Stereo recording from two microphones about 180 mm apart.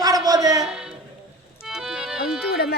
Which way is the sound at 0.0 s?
20° right (ahead or behind).